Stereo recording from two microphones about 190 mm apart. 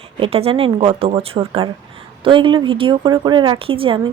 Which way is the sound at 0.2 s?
30° right (ahead or behind).